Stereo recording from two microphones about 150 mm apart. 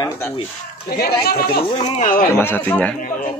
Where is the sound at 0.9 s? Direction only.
90° left.